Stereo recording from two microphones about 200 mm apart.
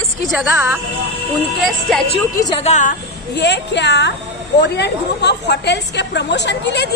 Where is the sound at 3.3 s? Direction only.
60° left (ahead or behind).